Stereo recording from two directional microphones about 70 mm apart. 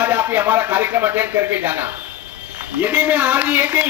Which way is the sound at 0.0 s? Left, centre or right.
Right.